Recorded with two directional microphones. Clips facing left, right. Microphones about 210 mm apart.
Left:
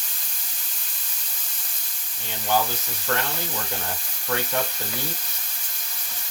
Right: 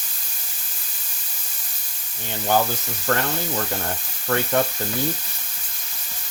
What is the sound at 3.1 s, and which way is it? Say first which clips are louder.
Speech: right 4 dB; 50° right (ahead or behind).